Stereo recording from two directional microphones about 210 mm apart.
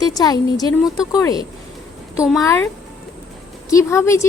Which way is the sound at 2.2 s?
Centre (ahead or behind).